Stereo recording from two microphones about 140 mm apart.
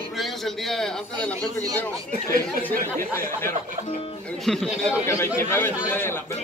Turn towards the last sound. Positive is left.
turn(degrees=15)  # may be behind; listen again after turning